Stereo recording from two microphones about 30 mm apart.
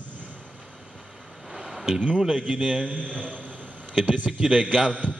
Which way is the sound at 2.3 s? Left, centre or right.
Right.